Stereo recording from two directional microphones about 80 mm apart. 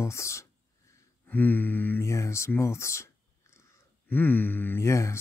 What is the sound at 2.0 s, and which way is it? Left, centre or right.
Speech, left.